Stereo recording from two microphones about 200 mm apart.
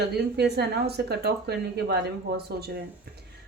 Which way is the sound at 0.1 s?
55° right (ahead or behind).